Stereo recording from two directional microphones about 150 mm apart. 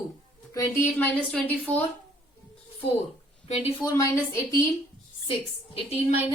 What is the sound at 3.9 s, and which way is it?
Speech, 15° left (ahead or behind).